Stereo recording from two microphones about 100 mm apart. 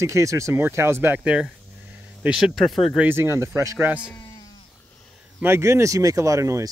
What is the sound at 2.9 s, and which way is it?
Speech, 20° right (ahead or behind).